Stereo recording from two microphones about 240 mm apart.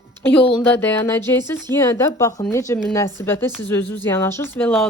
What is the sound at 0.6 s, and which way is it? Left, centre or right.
Speech, centre.